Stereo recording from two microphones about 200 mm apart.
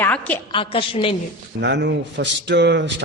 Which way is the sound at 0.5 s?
25° left (ahead or behind).